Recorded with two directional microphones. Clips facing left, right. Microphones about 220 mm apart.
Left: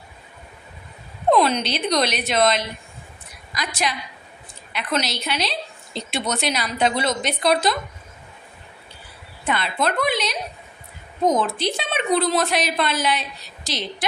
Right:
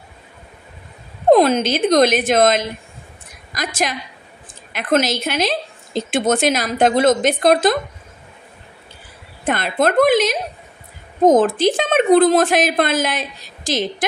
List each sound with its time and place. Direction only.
1.3 s a woman's voice: 45° right (ahead or behind)
9.5 s a woman's voice: 50° right (ahead or behind)